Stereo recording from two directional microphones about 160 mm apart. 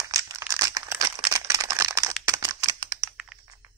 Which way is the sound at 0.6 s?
20° right (ahead or behind).